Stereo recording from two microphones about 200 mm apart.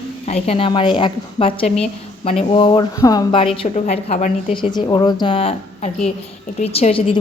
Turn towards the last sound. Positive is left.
turn(degrees=25)  # may be behind; listen again after turning